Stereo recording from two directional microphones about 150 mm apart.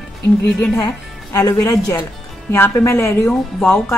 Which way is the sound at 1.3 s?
20° left (ahead or behind).